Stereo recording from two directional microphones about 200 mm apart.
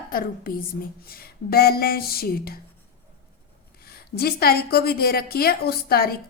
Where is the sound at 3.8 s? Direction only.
50° left (ahead or behind).